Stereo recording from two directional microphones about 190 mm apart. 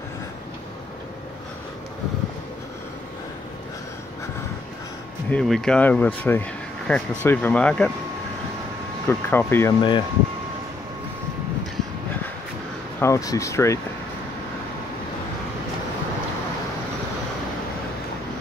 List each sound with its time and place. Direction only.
5.3 s speech: 5° left (ahead or behind)
9.0 s speech: 10° left (ahead or behind)
9.8 s speech: 25° left (ahead or behind)
13.0 s speech: 15° left (ahead or behind)